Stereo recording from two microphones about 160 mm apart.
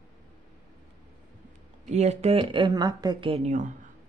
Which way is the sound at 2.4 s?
30° right (ahead or behind).